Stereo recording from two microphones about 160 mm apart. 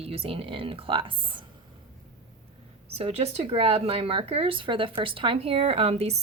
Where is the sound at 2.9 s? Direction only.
40° right (ahead or behind).